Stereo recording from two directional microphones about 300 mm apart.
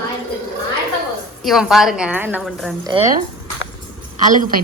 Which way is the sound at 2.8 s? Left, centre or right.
Centre.